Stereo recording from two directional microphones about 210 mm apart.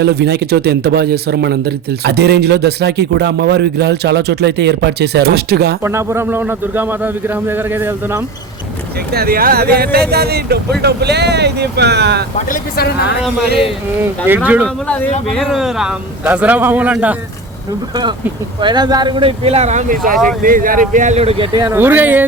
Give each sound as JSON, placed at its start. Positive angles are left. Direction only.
{"t": 0.0, "sound": "speech", "side_deg": -50}
{"t": 5.8, "sound": "a man's voice", "side_deg": -15}
{"t": 9.1, "sound": "speech", "side_deg": -45}
{"t": 12.5, "sound": "speech", "side_deg": 45}
{"t": 14.0, "sound": "a man's voice", "side_deg": -10}
{"t": 18.6, "sound": "speech", "side_deg": -20}
{"t": 21.8, "sound": "a man's voice", "side_deg": -10}